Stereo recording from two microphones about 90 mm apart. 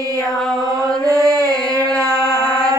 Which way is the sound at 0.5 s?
45° right (ahead or behind).